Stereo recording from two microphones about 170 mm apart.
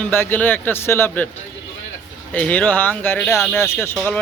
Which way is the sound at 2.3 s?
10° left (ahead or behind).